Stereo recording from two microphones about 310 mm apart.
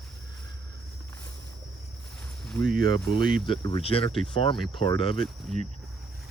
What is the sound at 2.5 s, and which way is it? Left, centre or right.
Speech, centre.